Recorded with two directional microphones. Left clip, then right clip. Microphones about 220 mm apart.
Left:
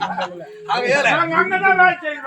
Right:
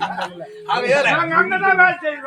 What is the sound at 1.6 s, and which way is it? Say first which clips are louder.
Speech: left 2 dB; 10° right (ahead or behind).